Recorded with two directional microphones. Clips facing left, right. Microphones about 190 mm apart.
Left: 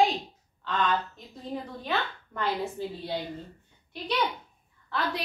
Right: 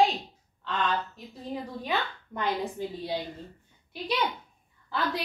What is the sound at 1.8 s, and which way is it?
A woman's voice, 15° right (ahead or behind).